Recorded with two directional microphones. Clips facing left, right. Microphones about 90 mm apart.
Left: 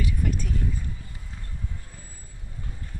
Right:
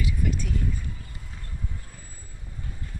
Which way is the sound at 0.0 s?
45° left (ahead or behind).